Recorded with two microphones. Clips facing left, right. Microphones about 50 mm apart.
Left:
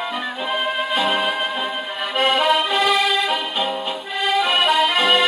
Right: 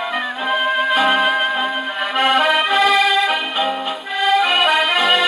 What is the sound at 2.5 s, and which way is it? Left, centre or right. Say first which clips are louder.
Music: right 3 dB; right.